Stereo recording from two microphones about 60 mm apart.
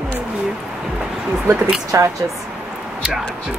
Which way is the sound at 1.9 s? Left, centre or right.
Right.